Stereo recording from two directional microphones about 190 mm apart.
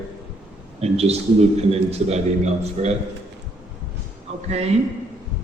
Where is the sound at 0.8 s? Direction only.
35° right (ahead or behind).